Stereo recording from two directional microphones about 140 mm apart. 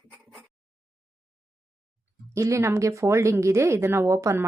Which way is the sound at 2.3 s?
20° right (ahead or behind).